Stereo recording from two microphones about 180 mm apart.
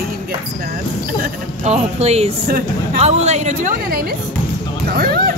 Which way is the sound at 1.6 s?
35° right (ahead or behind).